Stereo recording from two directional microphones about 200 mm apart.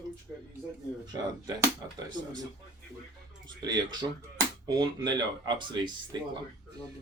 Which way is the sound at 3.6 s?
20° right (ahead or behind).